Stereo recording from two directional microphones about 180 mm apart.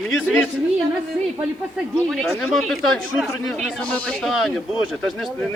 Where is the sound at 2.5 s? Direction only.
Centre (ahead or behind).